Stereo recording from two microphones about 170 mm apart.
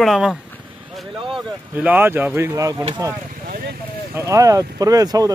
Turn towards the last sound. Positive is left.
turn(degrees=-20)  # may be behind; listen again after turning